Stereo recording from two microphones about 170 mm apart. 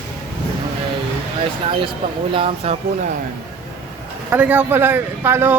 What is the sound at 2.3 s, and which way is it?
Speech, 35° right (ahead or behind).